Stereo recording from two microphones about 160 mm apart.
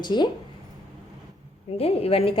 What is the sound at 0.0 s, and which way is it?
Speech, 25° left (ahead or behind).